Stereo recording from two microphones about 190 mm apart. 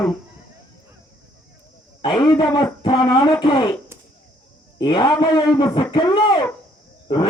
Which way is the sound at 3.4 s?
25° left (ahead or behind).